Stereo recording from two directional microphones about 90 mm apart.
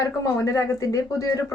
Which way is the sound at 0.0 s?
35° left (ahead or behind).